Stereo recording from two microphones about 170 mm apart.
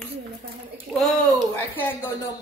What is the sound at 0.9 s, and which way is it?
Speech, 5° left (ahead or behind).